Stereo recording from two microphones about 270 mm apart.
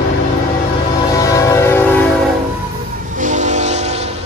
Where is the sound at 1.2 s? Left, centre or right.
Centre.